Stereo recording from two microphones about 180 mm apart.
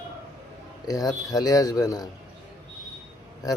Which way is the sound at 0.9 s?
20° left (ahead or behind).